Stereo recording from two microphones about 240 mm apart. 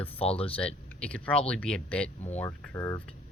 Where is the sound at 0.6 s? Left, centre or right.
Centre.